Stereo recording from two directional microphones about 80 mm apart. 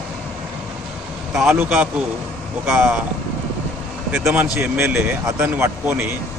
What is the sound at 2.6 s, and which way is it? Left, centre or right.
Speech, centre.